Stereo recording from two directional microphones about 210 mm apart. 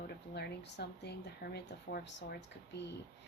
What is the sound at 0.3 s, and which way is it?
Speech, 55° left (ahead or behind).